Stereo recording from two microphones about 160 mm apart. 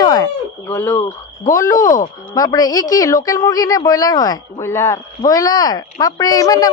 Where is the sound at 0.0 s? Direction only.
25° left (ahead or behind).